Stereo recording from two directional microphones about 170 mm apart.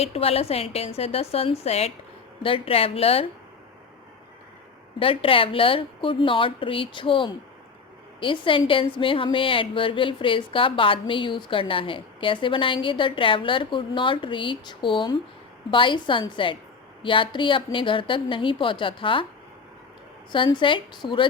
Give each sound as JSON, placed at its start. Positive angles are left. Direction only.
{"t": 0.0, "sound": "a woman's voice", "side_deg": 35}
{"t": 4.9, "sound": "a woman's voice", "side_deg": 30}
{"t": 20.3, "sound": "a woman's voice", "side_deg": 30}